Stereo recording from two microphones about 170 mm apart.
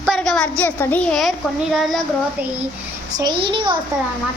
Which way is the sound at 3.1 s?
25° right (ahead or behind).